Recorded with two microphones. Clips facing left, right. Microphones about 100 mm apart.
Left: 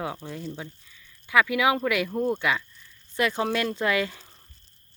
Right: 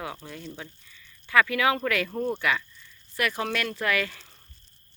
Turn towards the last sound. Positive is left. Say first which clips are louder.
# left 2 dB
turn(degrees=25)  # may be behind; listen again after turning